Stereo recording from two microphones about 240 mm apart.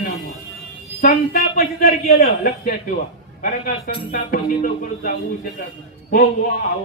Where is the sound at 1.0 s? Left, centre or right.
Left.